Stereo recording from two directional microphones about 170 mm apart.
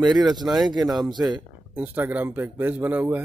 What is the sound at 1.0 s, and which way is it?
Speech, 25° right (ahead or behind).